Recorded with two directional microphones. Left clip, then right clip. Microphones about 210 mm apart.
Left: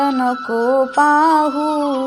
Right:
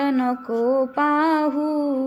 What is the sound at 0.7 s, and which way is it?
Music, centre (ahead or behind).